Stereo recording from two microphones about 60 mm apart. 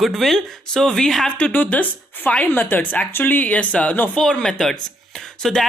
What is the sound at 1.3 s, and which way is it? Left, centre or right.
Speech, left.